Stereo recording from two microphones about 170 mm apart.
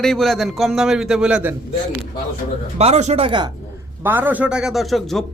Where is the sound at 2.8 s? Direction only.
40° right (ahead or behind).